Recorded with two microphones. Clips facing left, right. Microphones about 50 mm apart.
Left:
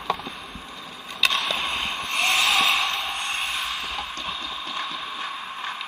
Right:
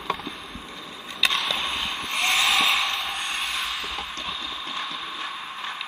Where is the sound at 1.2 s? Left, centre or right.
Centre.